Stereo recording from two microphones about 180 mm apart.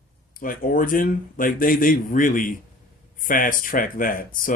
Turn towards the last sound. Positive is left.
turn(degrees=50)  # may be behind; listen again after turning